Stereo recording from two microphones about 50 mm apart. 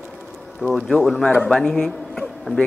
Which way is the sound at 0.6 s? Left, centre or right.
Right.